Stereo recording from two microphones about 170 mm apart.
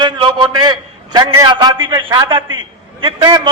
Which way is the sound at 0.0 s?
30° right (ahead or behind).